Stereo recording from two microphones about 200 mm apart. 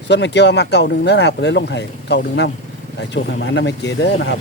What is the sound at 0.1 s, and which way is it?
Speech, 60° left (ahead or behind).